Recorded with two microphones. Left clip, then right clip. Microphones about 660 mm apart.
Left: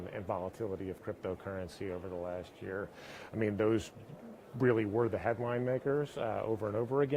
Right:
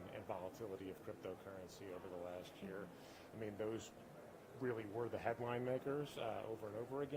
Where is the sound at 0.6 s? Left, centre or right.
Left.